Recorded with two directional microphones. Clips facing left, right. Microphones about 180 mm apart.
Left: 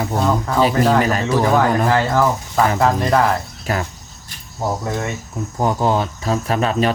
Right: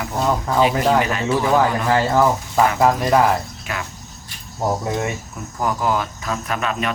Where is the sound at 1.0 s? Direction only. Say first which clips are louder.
Left 3 dB; 40° left (ahead or behind).